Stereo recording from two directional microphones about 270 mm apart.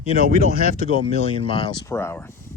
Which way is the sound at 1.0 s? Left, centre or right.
Centre.